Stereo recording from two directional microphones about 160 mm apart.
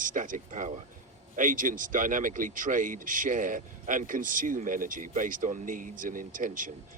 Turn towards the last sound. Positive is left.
turn(degrees=-55)  # may be behind; listen again after turning